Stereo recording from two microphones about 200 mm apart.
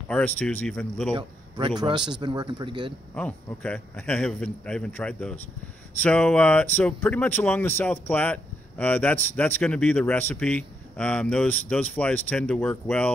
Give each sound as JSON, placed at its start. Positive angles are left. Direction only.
{"t": 0.1, "sound": "speech", "side_deg": 10}
{"t": 1.8, "sound": "speech", "side_deg": -20}
{"t": 3.2, "sound": "a man's voice", "side_deg": 5}